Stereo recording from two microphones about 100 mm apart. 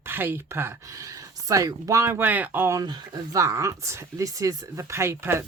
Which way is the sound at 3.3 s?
30° right (ahead or behind).